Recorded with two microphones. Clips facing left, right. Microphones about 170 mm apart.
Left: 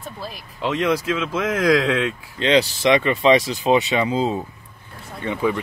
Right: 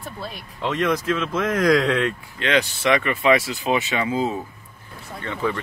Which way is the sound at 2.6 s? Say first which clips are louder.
Left 1 dB; 35° left (ahead or behind).